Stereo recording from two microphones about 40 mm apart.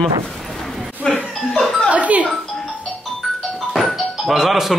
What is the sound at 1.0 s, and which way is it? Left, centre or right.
Speech, centre.